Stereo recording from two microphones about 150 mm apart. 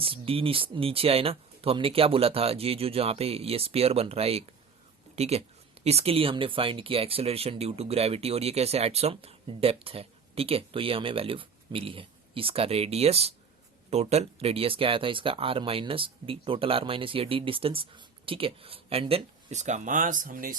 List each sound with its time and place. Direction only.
0.0 s speech: 35° right (ahead or behind); by 20.6 s 65° right (ahead or behind)